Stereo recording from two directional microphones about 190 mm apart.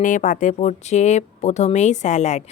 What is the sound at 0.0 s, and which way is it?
A woman's voice, 45° left (ahead or behind).